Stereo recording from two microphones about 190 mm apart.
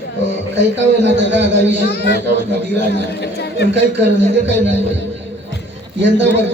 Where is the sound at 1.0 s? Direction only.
70° right (ahead or behind).